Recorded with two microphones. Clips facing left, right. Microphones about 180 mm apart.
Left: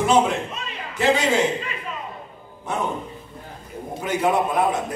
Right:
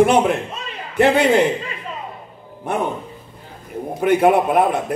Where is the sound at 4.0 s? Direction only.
60° right (ahead or behind).